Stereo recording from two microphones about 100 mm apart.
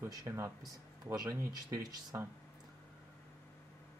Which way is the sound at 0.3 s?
25° right (ahead or behind).